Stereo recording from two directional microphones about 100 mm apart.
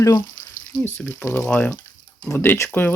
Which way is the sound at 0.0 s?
40° left (ahead or behind).